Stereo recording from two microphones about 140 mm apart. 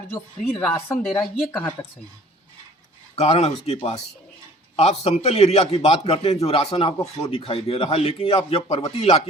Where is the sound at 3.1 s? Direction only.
50° left (ahead or behind).